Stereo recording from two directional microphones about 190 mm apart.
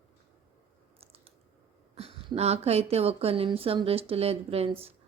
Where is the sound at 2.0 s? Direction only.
30° right (ahead or behind).